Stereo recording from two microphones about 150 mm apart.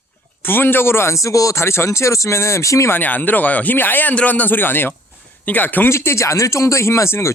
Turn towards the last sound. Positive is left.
turn(degrees=20)  # may be behind; listen again after turning